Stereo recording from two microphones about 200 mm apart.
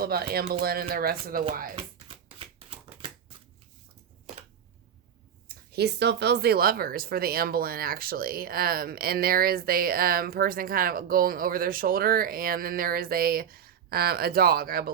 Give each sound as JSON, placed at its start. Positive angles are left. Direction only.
{"t": 0.0, "sound": "speech", "side_deg": -50}
{"t": 1.7, "sound": "a sound", "side_deg": -25}
{"t": 5.7, "sound": "speech", "side_deg": -55}